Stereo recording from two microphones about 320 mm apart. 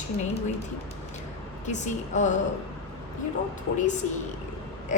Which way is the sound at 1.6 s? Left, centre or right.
Left.